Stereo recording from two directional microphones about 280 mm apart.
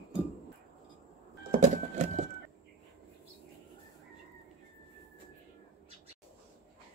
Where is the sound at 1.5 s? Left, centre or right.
Right.